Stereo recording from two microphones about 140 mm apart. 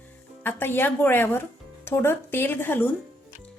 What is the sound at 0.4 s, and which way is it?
Speech, 15° left (ahead or behind).